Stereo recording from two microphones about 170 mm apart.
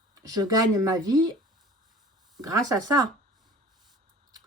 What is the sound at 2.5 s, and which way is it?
Speech, 20° right (ahead or behind).